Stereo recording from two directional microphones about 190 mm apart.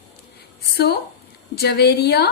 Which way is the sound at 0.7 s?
60° left (ahead or behind).